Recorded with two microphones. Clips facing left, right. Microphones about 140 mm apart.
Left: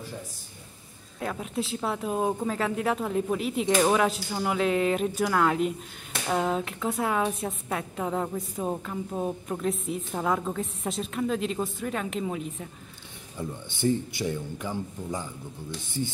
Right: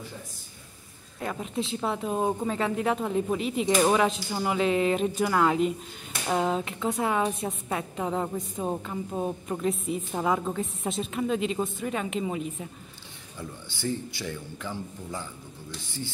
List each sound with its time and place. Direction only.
1.2 s a woman's voice: centre (ahead or behind)
13.4 s speech: 20° left (ahead or behind)